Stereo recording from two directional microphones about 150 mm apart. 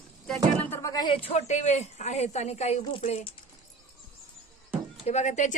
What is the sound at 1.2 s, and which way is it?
A woman's voice, 50° left (ahead or behind).